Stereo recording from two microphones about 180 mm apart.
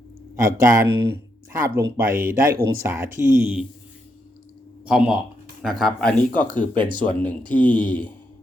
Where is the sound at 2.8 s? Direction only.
15° right (ahead or behind).